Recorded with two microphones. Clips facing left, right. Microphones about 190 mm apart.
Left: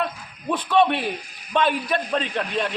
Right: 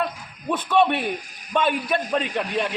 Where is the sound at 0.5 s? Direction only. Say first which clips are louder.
Even; 5° right (ahead or behind).